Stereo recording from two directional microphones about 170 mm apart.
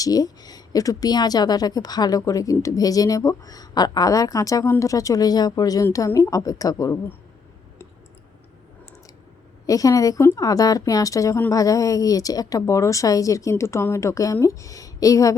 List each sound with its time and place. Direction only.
0.0 s a woman's voice: 20° left (ahead or behind)
9.6 s a woman's voice: 20° left (ahead or behind)